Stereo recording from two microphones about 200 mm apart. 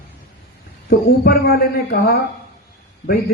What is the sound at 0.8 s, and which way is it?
A man's voice, 50° left (ahead or behind).